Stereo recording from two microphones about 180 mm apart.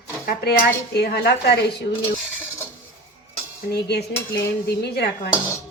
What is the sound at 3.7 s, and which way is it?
Speech, 65° left (ahead or behind).